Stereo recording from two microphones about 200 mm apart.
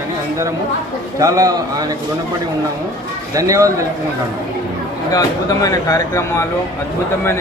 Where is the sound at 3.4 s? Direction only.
15° right (ahead or behind).